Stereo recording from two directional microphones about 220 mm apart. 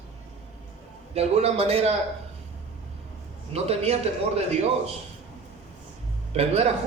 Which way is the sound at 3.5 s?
30° right (ahead or behind).